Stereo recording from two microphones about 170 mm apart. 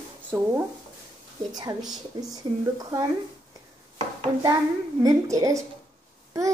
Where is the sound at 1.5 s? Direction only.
25° right (ahead or behind).